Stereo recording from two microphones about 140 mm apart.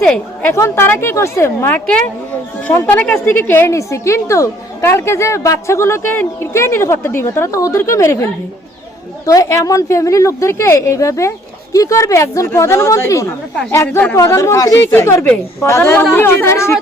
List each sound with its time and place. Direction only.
0.0 s a woman's voice: 10° left (ahead or behind)
0.5 s a woman's voice: 20° left (ahead or behind)
14.9 s a woman's voice: 15° left (ahead or behind)